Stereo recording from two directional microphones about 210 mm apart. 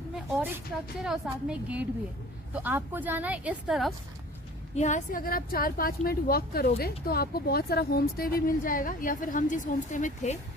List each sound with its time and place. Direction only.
0.1 s a sound: centre (ahead or behind)
1.0 s a woman's voice: centre (ahead or behind)
4.7 s a woman's voice: 35° left (ahead or behind)